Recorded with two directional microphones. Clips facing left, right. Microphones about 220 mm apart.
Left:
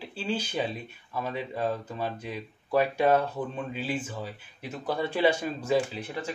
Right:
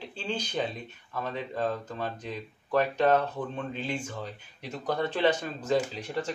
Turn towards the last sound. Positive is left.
turn(degrees=5)  # may be behind; listen again after turning